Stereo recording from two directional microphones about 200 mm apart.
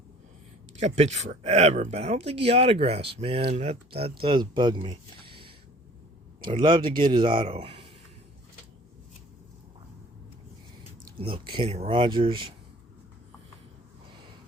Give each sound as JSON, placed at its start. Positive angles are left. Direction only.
{"t": 0.8, "sound": "speech", "side_deg": -35}
{"t": 11.2, "sound": "speech", "side_deg": -25}